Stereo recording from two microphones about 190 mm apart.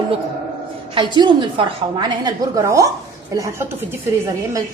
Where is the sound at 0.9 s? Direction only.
25° right (ahead or behind).